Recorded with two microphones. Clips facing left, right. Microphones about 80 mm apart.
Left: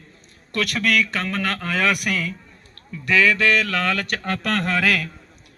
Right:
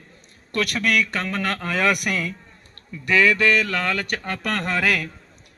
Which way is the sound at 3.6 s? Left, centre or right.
Centre.